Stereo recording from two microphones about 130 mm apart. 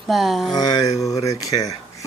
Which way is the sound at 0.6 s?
30° left (ahead or behind).